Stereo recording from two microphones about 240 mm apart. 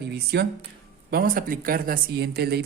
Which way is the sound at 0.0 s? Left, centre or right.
Right.